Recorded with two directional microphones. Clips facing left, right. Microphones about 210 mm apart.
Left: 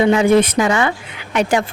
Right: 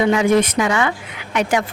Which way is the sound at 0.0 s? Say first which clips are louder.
Left 3 dB; 30° left (ahead or behind).